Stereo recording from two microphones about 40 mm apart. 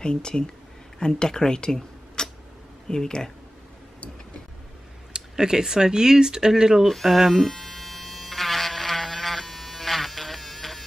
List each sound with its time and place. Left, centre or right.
0.0 s speech: left
2.2 s a sound: centre
2.9 s speech: centre
5.1 s speech: centre
6.9 s speech: centre
7.2 s a sound: centre